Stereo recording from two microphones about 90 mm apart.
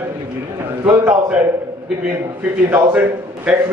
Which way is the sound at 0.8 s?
20° right (ahead or behind).